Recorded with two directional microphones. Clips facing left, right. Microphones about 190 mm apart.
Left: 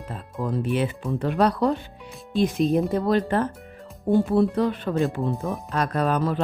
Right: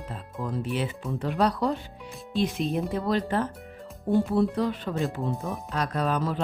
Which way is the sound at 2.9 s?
50° left (ahead or behind).